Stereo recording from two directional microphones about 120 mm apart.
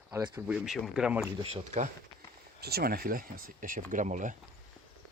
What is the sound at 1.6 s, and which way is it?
Speech, 90° right.